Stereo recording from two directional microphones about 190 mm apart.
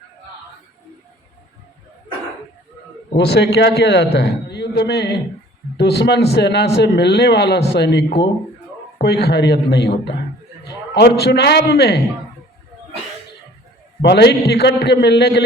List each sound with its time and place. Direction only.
3.2 s a man's voice: 60° left (ahead or behind)
14.0 s a man's voice: 60° left (ahead or behind)